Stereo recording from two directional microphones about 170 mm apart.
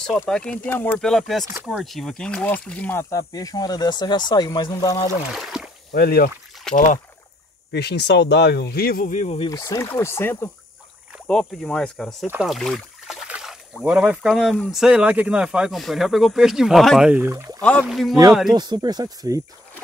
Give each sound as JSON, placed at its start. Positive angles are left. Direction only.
{"t": 0.3, "sound": "speech", "side_deg": 5}
{"t": 5.3, "sound": "speech", "side_deg": 0}
{"t": 5.9, "sound": "speech", "side_deg": 65}
{"t": 6.7, "sound": "speech", "side_deg": 50}
{"t": 7.7, "sound": "speech", "side_deg": 75}
{"t": 9.2, "sound": "speech", "side_deg": 35}
{"t": 9.5, "sound": "speech", "side_deg": 20}
{"t": 17.6, "sound": "speech", "side_deg": 5}
{"t": 18.5, "sound": "speech", "side_deg": -25}